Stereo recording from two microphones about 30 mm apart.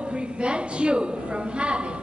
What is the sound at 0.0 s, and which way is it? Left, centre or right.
A woman's voice, right.